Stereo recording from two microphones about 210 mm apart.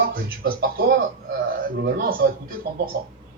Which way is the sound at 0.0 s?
45° right (ahead or behind).